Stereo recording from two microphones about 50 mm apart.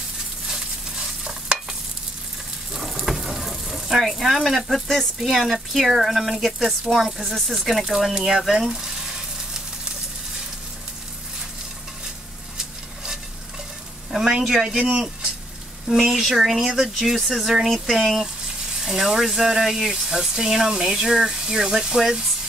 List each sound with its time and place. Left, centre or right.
1.2 s stir: centre
2.7 s sizzle: centre
4.8 s speech: centre
14.1 s speech: centre
14.8 s speech: right
15.9 s speech: centre
16.6 s speech: centre
17.0 s speech: centre